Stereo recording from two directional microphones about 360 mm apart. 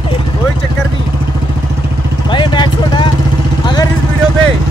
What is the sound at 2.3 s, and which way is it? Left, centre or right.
Speech, centre.